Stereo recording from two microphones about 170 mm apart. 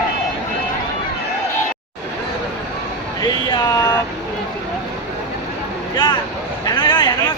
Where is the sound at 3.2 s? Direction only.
20° left (ahead or behind).